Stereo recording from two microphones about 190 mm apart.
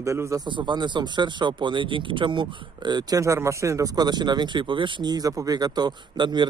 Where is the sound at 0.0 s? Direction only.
15° right (ahead or behind).